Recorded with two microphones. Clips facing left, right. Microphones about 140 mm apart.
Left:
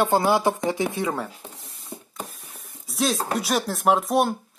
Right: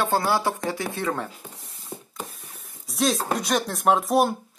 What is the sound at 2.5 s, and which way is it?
Speech, centre (ahead or behind).